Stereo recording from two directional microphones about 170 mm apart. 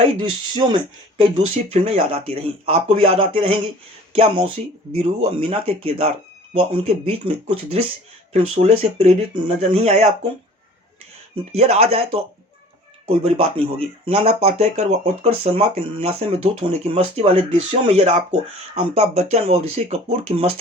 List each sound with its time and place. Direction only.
0.0 s speech: 30° right (ahead or behind)
11.5 s speech: 40° right (ahead or behind)
13.2 s speech: 35° right (ahead or behind)